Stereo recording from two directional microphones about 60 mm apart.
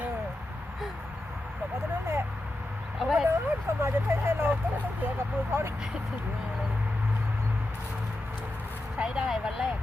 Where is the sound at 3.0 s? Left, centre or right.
Centre.